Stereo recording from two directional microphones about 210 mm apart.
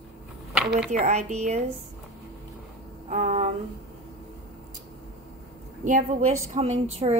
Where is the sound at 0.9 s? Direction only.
35° right (ahead or behind).